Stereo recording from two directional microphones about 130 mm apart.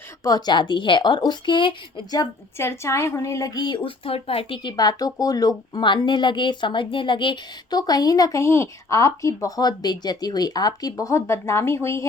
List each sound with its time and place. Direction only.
0.3 s speech: 30° left (ahead or behind)
2.6 s speech: 20° left (ahead or behind)